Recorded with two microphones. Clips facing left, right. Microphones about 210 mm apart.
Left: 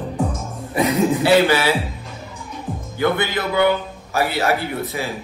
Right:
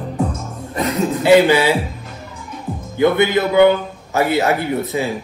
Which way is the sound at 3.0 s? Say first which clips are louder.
Right 6 dB; 15° right (ahead or behind).